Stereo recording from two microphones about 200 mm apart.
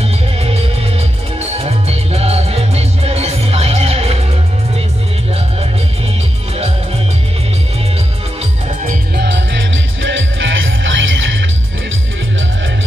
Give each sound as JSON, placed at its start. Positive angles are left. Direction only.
{"t": 0.0, "sound": "music", "side_deg": -30}
{"t": 8.8, "sound": "music", "side_deg": -55}
{"t": 10.0, "sound": "music", "side_deg": -70}